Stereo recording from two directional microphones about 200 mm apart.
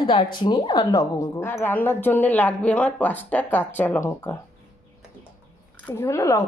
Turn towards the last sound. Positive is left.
turn(degrees=15)  # may be behind; listen again after turning